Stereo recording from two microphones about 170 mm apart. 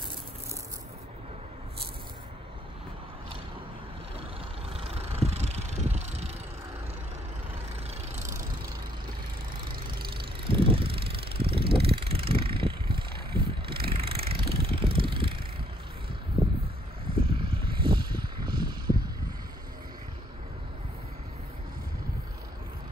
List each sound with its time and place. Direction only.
4.6 s vehicle: 35° right (ahead or behind)
10.5 s vehicle: 30° right (ahead or behind)
17.3 s a sound: 30° right (ahead or behind)